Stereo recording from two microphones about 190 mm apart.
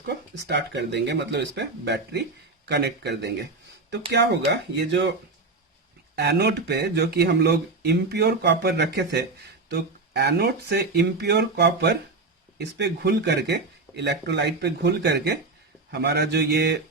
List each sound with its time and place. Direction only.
0.0 s speech: 60° right (ahead or behind)
6.1 s speech: 60° right (ahead or behind)